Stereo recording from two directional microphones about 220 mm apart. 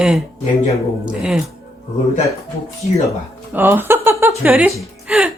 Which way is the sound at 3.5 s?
10° right (ahead or behind).